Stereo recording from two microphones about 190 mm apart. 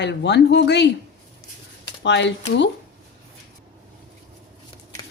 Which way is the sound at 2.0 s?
70° left (ahead or behind).